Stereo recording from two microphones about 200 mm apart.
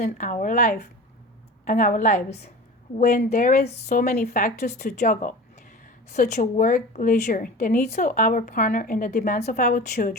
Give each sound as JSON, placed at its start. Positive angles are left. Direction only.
{"t": 0.0, "sound": "a woman's voice", "side_deg": 40}